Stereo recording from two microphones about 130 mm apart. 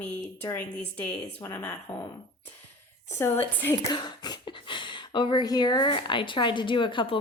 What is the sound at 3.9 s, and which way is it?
Speech, 35° left (ahead or behind).